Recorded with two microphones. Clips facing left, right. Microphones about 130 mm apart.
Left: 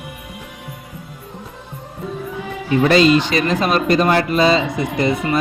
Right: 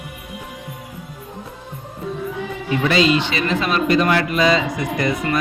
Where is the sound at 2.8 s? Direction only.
40° left (ahead or behind).